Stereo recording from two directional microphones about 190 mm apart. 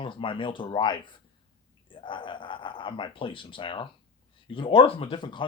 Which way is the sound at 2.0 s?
25° left (ahead or behind).